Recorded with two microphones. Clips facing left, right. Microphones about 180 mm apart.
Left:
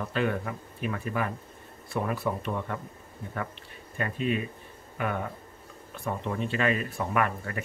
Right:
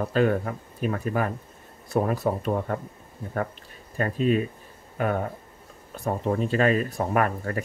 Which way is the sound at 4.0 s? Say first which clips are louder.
Right 6 dB; 40° right (ahead or behind).